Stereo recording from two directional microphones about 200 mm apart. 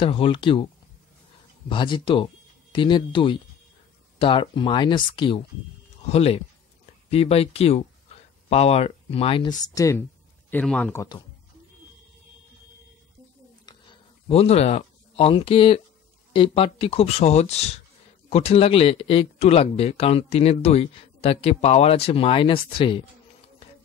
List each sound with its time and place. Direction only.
0.0 s speech: 25° left (ahead or behind)
1.7 s speech: 25° left (ahead or behind)
13.7 s a sound: 25° left (ahead or behind)
16.3 s speech: 25° left (ahead or behind)